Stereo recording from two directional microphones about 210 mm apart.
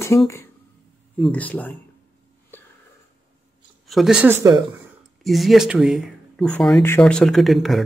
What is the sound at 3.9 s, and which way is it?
Speech, centre (ahead or behind).